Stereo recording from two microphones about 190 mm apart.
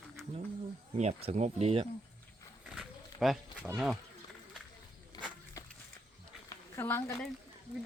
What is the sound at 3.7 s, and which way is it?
Speech, centre (ahead or behind).